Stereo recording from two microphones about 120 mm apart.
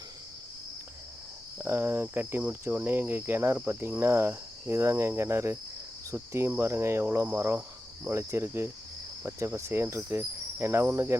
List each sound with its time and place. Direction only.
1.5 s speech: 20° right (ahead or behind)
3.7 s cricket: 15° right (ahead or behind)